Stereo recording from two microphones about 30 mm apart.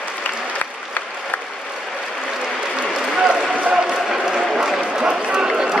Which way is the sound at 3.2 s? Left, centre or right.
Right.